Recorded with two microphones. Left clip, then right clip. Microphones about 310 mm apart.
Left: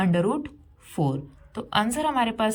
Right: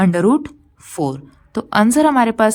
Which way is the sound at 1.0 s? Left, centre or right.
Right.